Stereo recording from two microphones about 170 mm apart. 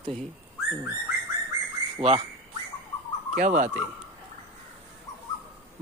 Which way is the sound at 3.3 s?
50° right (ahead or behind).